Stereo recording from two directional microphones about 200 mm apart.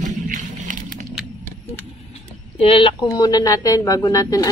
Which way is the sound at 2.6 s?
25° left (ahead or behind).